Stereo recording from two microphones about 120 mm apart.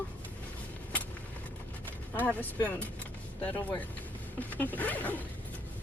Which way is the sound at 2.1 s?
15° left (ahead or behind).